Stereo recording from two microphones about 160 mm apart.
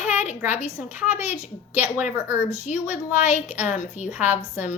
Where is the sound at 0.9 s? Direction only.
10° right (ahead or behind).